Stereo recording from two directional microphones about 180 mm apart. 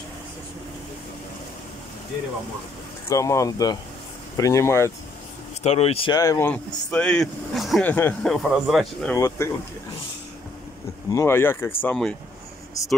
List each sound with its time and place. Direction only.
3.1 s speech: 15° left (ahead or behind)
5.6 s speech: 35° left (ahead or behind)
6.1 s speech: 15° left (ahead or behind); by 9.1 s centre (ahead or behind)
9.1 s speech: 15° left (ahead or behind)
11.1 s speech: 15° left (ahead or behind)